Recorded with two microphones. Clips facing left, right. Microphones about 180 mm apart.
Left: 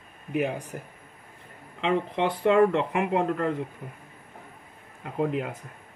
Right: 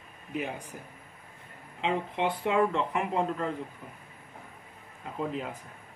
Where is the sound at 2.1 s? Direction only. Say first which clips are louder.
Left 7 dB; 75° left (ahead or behind).